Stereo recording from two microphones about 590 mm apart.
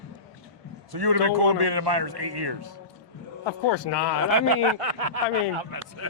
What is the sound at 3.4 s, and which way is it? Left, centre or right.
Speech, left.